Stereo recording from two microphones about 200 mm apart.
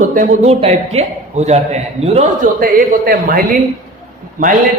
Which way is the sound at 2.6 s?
45° right (ahead or behind).